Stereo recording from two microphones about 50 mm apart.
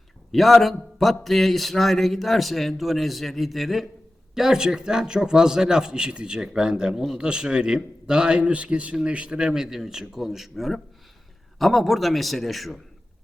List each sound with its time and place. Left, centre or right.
0.3 s a man's voice: centre